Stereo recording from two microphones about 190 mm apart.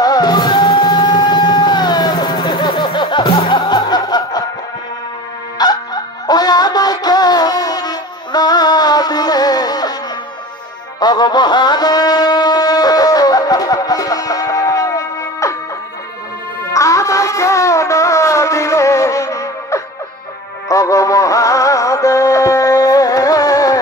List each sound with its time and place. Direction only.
0.0 s music: 20° left (ahead or behind)
5.6 s music: 20° left (ahead or behind)
11.0 s music: 20° left (ahead or behind)
16.7 s music: 15° left (ahead or behind)